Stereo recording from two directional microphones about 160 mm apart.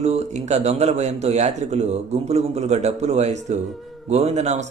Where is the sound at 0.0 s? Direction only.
45° right (ahead or behind).